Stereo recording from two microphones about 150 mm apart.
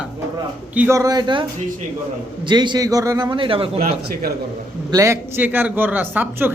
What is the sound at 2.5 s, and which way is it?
A man's voice, 30° right (ahead or behind).